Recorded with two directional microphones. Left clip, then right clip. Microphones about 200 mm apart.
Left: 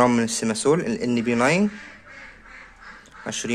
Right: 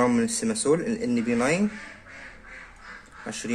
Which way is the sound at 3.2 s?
45° left (ahead or behind).